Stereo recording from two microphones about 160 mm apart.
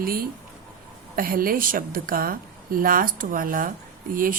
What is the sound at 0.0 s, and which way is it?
A woman's voice, 65° right (ahead or behind).